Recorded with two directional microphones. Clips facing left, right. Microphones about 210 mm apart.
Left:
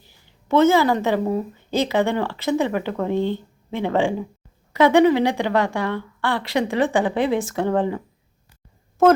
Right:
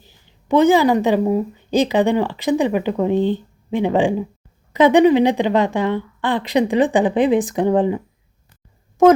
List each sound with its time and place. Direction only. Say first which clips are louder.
0.4 s a woman's voice: right 3 dB; 15° right (ahead or behind)